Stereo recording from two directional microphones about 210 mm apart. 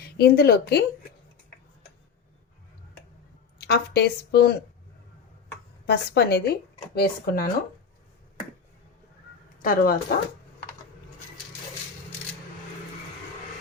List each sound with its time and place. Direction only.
0.2 s speech: 50° left (ahead or behind)
3.6 s speech: 50° left (ahead or behind)
5.8 s speech: 50° left (ahead or behind)
9.6 s speech: 45° left (ahead or behind)